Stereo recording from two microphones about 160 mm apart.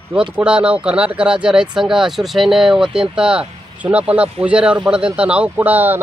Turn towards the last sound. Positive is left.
turn(degrees=-10)  # may be behind; listen again after turning